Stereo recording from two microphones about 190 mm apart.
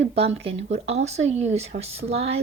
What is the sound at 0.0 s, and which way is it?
A woman's voice, 35° right (ahead or behind).